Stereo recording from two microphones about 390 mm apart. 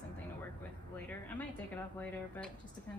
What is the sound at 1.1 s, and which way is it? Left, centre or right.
Speech, centre.